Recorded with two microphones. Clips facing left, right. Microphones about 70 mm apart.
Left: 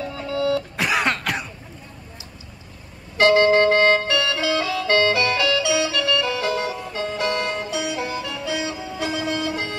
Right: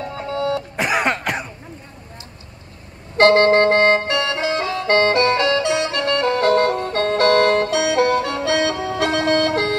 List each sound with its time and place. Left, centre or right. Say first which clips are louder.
0.0 s printer: right 1 dB; right
0.7 s throat clearing: right 2 dB; centre
3.2 s music: right 3 dB; right